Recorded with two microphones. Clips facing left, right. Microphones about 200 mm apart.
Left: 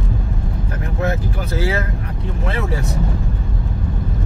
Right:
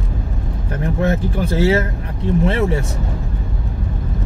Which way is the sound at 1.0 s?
30° right (ahead or behind).